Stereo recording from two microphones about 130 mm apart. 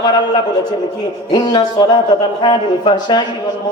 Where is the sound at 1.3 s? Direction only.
30° left (ahead or behind).